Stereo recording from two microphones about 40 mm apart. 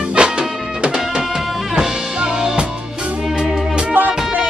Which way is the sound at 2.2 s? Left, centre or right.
Centre.